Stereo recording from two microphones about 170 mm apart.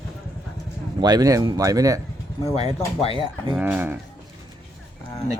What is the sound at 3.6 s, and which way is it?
Speech, 10° right (ahead or behind).